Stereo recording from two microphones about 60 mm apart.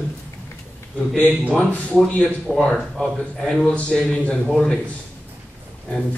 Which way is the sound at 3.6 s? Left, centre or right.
Centre.